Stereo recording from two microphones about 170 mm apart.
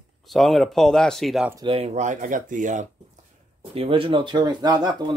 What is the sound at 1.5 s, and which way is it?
Speech, 25° right (ahead or behind).